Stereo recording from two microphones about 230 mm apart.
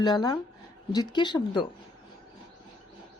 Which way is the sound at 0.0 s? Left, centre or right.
Centre.